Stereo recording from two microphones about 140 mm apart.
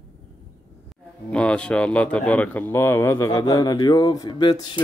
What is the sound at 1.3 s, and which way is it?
Speech, 10° left (ahead or behind).